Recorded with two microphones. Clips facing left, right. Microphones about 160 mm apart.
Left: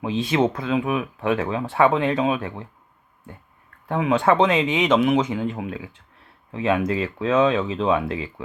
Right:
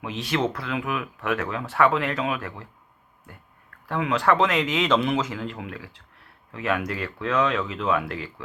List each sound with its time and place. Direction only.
0.3 s speech: 25° left (ahead or behind)
3.8 s speech: 25° left (ahead or behind)